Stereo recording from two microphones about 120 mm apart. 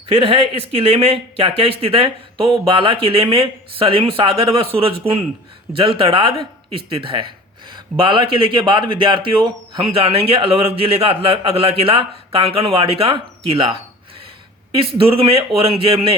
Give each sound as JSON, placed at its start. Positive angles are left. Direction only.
{"t": 0.1, "sound": "speech", "side_deg": -55}